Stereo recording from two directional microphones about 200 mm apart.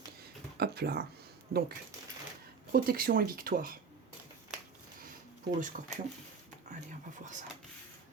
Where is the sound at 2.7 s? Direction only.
45° right (ahead or behind).